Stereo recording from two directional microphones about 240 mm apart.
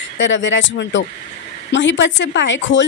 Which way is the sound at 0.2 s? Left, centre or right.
Left.